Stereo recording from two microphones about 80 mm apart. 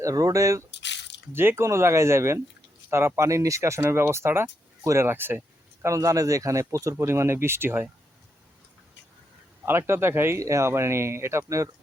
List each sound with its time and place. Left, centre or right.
0.0 s speech: right
1.3 s speech: right
5.8 s speech: right
9.6 s speech: right